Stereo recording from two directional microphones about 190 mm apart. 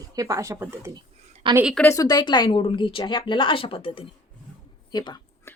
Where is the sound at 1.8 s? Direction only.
15° left (ahead or behind).